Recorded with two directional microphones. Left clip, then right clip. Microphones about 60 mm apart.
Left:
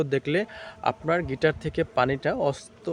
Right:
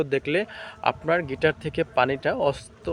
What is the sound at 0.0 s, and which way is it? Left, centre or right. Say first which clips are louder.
A man's voice: right 1 dB; centre.